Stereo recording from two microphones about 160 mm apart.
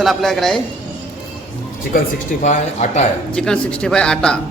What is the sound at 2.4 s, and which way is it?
Speech, 45° left (ahead or behind).